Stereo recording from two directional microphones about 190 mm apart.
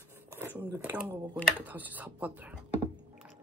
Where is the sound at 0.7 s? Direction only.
10° right (ahead or behind).